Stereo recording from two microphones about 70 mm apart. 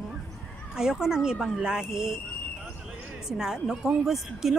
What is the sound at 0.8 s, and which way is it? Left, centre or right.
A woman's voice, centre.